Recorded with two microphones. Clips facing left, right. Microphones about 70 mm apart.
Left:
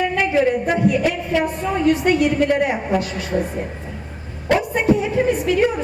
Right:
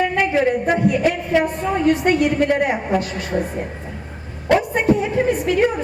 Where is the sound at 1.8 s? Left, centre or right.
Right.